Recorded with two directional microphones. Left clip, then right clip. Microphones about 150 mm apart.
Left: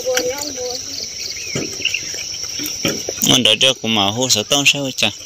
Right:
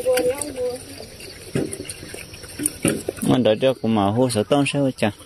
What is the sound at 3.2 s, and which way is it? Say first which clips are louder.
Speech: left 5 dB; 10° right (ahead or behind).